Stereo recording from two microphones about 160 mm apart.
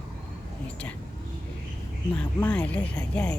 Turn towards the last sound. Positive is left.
turn(degrees=5)  # may be behind; listen again after turning